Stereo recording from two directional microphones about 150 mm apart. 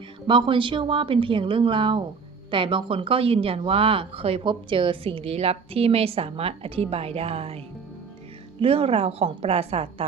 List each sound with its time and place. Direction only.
0.3 s speech: 35° right (ahead or behind)
8.6 s speech: 40° right (ahead or behind)